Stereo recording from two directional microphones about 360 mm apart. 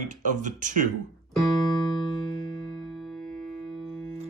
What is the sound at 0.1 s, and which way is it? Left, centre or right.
Speech, right.